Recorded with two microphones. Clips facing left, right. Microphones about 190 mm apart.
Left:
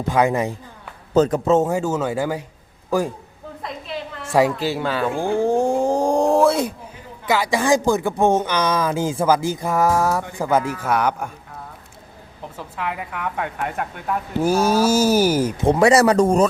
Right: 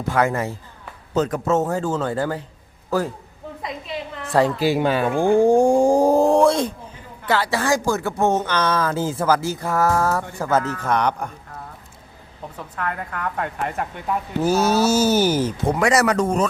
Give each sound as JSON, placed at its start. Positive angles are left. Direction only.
{"t": 0.1, "sound": "speech", "side_deg": 15}
{"t": 4.3, "sound": "speech", "side_deg": 10}
{"t": 4.5, "sound": "speech", "side_deg": -15}
{"t": 12.5, "sound": "a woman's voice", "side_deg": 10}
{"t": 14.4, "sound": "speech", "side_deg": 10}
{"t": 15.6, "sound": "speech", "side_deg": 30}